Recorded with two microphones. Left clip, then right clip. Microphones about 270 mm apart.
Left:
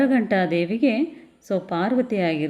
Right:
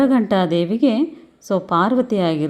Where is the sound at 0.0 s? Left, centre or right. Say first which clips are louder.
Right 3 dB; centre.